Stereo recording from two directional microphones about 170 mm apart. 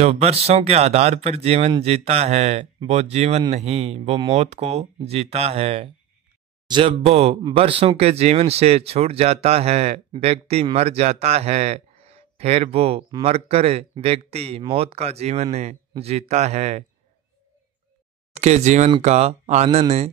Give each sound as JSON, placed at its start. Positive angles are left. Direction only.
{"t": 0.0, "sound": "speech", "side_deg": -35}
{"t": 18.3, "sound": "speech", "side_deg": -40}